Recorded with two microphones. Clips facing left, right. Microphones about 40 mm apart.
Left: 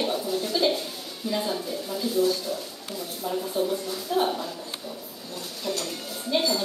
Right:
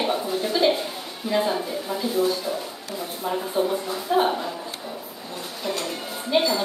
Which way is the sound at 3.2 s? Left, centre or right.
Right.